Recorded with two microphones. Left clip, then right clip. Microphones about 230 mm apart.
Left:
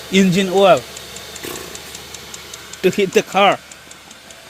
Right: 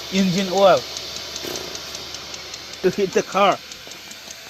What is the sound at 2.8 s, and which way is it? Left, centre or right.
Speech, left.